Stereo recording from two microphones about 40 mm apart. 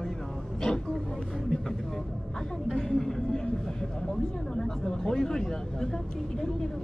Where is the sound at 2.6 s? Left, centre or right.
Centre.